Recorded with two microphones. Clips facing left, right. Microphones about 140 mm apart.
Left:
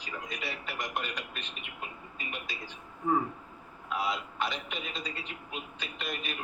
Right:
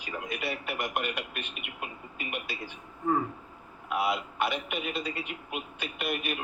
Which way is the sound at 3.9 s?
60° right (ahead or behind).